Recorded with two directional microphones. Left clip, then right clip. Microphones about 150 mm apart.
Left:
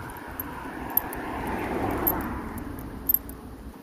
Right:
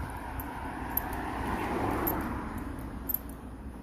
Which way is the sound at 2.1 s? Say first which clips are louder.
Left 3 dB; 60° left (ahead or behind).